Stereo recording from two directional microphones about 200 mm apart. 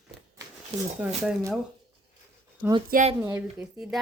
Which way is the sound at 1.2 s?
5° right (ahead or behind).